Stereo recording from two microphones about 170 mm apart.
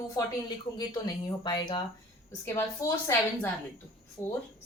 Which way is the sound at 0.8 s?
25° left (ahead or behind).